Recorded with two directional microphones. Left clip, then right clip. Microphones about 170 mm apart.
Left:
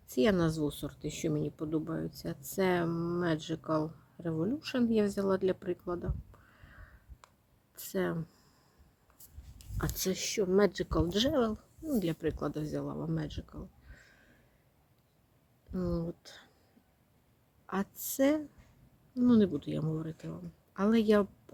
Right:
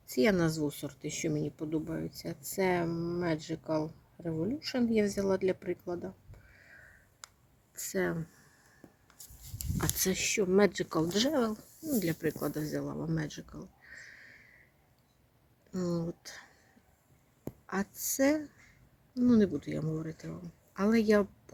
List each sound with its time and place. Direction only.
0.1 s speech: centre (ahead or behind)
7.2 s a sound: 10° right (ahead or behind)
7.8 s speech: centre (ahead or behind)
9.6 s speech: 15° right (ahead or behind)
15.7 s speech: 10° right (ahead or behind)
17.7 s speech: centre (ahead or behind)